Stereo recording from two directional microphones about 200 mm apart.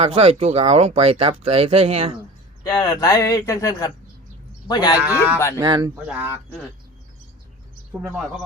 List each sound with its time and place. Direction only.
0.0 s speech: 30° right (ahead or behind)
2.6 s speech: 20° left (ahead or behind)
4.9 s speech: 5° right (ahead or behind)
5.5 s speech: 20° right (ahead or behind)
6.1 s a man's voice: 5° right (ahead or behind)